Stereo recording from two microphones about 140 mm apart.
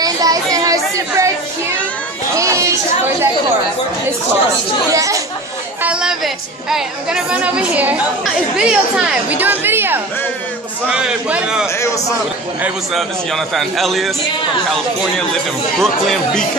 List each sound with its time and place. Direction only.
0.0 s a sound: 25° right (ahead or behind)
2.3 s a sound: 20° right (ahead or behind)
4.9 s chatter: 25° right (ahead or behind)
5.8 s speech: 5° right (ahead or behind)
11.7 s a man's voice: 20° left (ahead or behind)
12.9 s speech: centre (ahead or behind)